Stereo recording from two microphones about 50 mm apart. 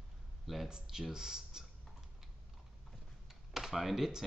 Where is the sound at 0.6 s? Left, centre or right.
Centre.